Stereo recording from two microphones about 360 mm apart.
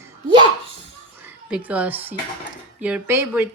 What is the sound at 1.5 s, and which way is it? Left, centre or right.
Speech, centre.